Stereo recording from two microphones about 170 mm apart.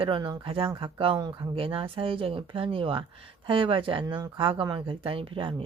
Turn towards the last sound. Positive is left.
turn(degrees=-30)  # may be behind; listen again after turning